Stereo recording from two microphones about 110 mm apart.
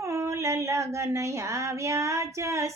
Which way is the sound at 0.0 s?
25° right (ahead or behind).